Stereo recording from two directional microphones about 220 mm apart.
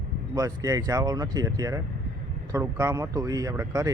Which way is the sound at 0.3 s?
15° right (ahead or behind).